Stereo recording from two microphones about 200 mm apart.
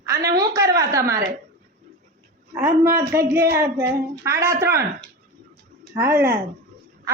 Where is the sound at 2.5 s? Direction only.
10° right (ahead or behind).